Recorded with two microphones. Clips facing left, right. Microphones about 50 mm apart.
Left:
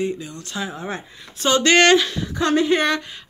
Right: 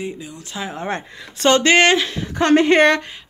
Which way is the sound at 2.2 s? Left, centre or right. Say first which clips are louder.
Right 4 dB; right.